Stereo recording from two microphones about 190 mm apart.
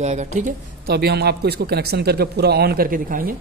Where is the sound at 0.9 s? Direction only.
60° right (ahead or behind).